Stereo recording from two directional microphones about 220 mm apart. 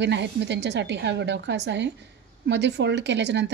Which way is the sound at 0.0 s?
50° right (ahead or behind).